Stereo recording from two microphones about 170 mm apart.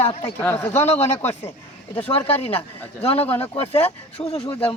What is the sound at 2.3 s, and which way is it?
Speech, 35° left (ahead or behind).